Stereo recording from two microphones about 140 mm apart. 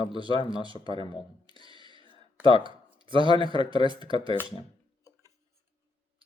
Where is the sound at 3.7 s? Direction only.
35° right (ahead or behind).